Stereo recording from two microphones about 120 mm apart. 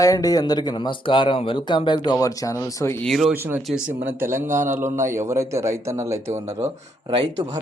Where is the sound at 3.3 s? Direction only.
20° right (ahead or behind).